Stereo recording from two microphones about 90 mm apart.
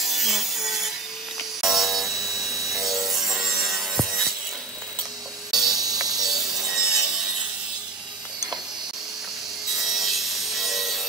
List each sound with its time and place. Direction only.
0.0 s wood: centre (ahead or behind)
1.6 s music: centre (ahead or behind)
5.5 s music: 5° right (ahead or behind)
5.8 s music: 45° right (ahead or behind)
6.2 s sawing: 5° right (ahead or behind)
9.7 s wood: centre (ahead or behind)